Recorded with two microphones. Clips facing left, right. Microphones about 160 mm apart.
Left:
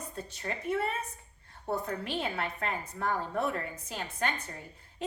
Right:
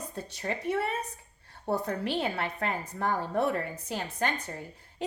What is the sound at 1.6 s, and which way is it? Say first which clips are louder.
A woman's voice: right 4 dB; 30° right (ahead or behind).